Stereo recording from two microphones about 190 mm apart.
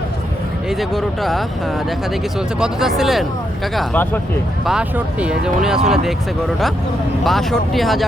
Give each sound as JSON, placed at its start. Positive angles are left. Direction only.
{"t": 0.7, "sound": "speech", "side_deg": 0}
{"t": 2.6, "sound": "speech", "side_deg": 0}
{"t": 3.8, "sound": "speech", "side_deg": 10}
{"t": 4.6, "sound": "speech", "side_deg": -5}
{"t": 7.3, "sound": "speech", "side_deg": 0}